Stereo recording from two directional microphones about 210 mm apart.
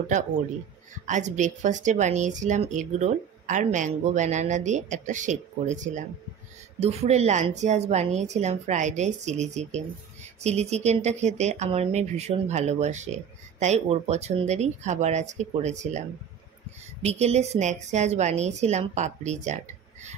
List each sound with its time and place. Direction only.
1.0 s speech: 35° right (ahead or behind)
17.0 s speech: 30° right (ahead or behind)